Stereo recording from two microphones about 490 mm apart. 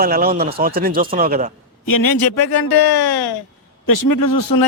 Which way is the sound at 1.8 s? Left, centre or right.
Left.